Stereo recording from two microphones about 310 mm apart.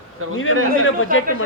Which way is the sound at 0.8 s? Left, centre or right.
Left.